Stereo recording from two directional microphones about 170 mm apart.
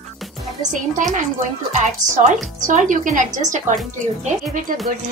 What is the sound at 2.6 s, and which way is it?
A woman's voice, 50° right (ahead or behind).